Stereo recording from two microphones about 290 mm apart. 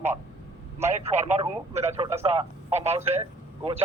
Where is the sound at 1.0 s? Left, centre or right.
Right.